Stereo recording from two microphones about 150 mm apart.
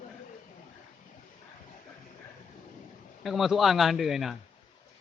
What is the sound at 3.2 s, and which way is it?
A man's voice, centre (ahead or behind).